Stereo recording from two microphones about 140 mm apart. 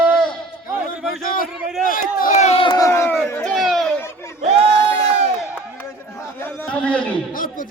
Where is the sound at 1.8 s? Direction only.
85° left.